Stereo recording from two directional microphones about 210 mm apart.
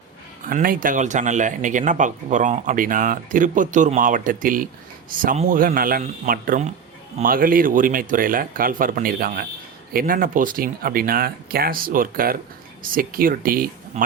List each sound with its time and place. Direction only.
0.4 s speech: 40° right (ahead or behind)